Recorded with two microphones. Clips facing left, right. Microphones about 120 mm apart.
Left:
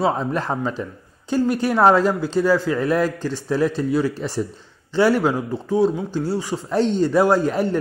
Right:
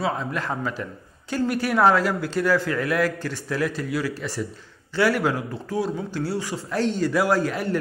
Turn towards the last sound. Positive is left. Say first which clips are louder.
# left 5 dB
turn(degrees=25)  # may be behind; listen again after turning